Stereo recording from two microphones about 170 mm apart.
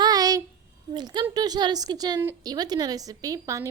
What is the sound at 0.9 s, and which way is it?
A woman's voice, 25° right (ahead or behind).